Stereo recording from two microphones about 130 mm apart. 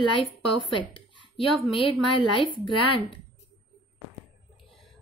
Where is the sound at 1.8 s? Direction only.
40° left (ahead or behind).